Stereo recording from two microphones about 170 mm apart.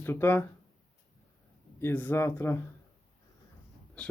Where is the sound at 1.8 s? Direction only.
10° left (ahead or behind).